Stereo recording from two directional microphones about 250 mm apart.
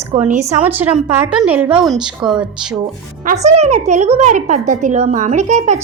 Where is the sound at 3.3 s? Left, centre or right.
Right.